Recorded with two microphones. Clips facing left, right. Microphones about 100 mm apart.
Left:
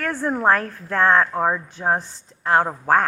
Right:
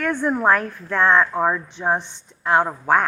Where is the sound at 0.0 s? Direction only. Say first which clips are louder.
Right 1 dB; 35° left (ahead or behind).